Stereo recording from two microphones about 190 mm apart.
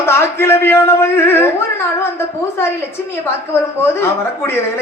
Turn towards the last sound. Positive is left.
turn(degrees=10)  # may be behind; listen again after turning